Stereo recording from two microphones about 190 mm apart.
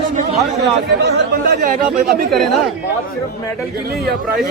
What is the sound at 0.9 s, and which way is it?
Speech, 60° right (ahead or behind).